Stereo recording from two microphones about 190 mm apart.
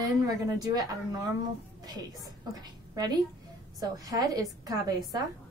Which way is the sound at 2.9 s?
20° right (ahead or behind).